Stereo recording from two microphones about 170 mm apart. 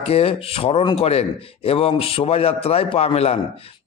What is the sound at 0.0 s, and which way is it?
A man's voice, 35° left (ahead or behind).